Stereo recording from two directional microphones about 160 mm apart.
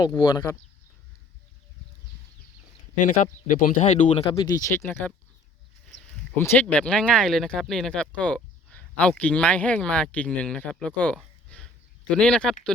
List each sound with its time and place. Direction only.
0.2 s speech: 25° left (ahead or behind)
3.0 s speech: 55° left (ahead or behind)
4.1 s speech: 35° left (ahead or behind)
6.3 s speech: 10° left (ahead or behind)
11.4 s a sound: 10° left (ahead or behind)